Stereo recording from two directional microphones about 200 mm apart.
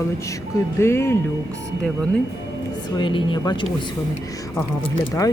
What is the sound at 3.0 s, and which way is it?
Speech, 25° left (ahead or behind).